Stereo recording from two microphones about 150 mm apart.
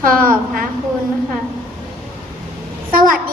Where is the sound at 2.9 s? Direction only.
70° right (ahead or behind).